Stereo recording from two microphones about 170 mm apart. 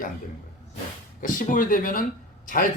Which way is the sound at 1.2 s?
55° left (ahead or behind).